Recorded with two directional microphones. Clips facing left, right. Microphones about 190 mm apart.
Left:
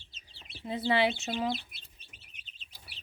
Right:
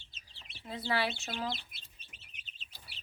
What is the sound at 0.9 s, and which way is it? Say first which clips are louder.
Speech: left 6 dB; 20° left (ahead or behind).